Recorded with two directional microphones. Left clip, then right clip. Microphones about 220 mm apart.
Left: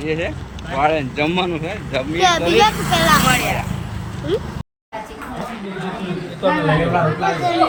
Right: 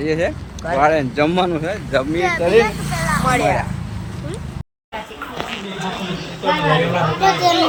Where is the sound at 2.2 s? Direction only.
30° left (ahead or behind).